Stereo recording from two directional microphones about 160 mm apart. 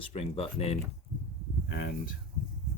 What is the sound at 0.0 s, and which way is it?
Speech, 40° left (ahead or behind).